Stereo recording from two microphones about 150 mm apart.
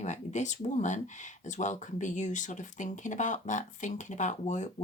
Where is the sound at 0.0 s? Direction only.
50° left (ahead or behind).